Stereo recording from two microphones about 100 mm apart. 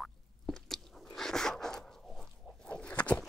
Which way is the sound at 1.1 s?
5° left (ahead or behind).